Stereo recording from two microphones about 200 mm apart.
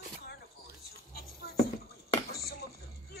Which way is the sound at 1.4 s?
50° left (ahead or behind).